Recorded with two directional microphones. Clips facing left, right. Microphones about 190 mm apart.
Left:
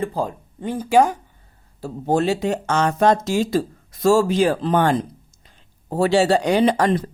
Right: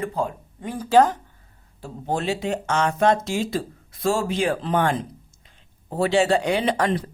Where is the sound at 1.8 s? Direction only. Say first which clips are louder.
Left 7 dB; 40° left (ahead or behind).